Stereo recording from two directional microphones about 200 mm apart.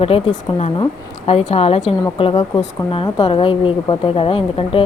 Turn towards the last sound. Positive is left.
turn(degrees=30)  # may be behind; listen again after turning